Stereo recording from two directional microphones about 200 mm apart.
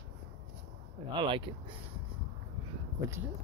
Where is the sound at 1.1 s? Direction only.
25° right (ahead or behind).